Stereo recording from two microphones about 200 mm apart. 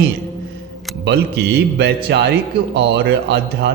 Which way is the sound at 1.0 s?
55° right (ahead or behind).